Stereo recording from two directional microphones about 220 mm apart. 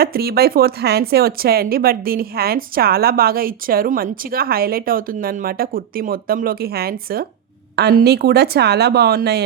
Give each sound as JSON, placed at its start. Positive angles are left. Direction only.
{"t": 0.0, "sound": "a woman's voice", "side_deg": -45}